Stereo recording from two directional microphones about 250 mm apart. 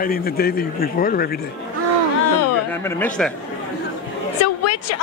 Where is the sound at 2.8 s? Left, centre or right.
Centre.